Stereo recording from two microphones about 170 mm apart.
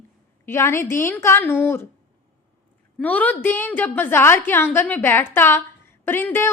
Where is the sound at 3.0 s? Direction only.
10° left (ahead or behind).